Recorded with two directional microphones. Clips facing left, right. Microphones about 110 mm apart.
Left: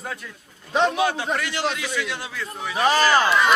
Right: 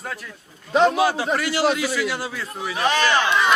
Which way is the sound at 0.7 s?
Centre (ahead or behind).